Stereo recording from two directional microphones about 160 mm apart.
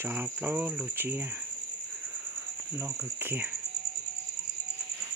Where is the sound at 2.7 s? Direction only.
15° right (ahead or behind).